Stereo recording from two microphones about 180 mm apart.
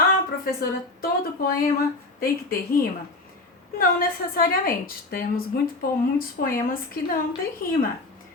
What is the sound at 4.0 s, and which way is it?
A woman's voice, 55° left (ahead or behind).